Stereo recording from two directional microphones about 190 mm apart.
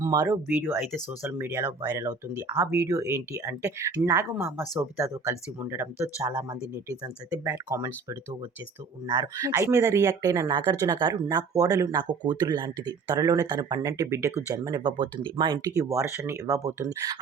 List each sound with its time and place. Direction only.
0.0 s speech: 15° right (ahead or behind)
9.0 s speech: 15° right (ahead or behind)